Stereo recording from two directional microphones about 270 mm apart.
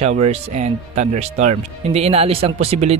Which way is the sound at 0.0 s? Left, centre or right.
Right.